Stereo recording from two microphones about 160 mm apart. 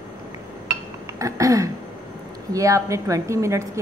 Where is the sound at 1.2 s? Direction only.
20° right (ahead or behind).